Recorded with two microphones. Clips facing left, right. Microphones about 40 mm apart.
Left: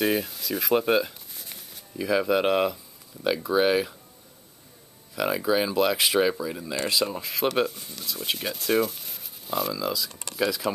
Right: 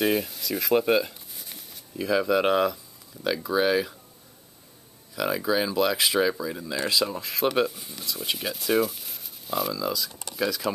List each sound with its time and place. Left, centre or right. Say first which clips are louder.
0.0 s a sound: even; centre
2.1 s speech: even; centre
5.1 s speech: left 1 dB; centre